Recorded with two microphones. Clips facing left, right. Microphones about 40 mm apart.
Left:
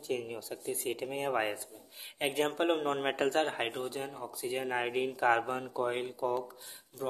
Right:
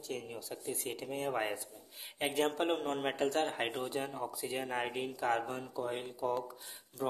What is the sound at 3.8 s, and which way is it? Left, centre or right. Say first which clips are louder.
Speech: right 1 dB; centre.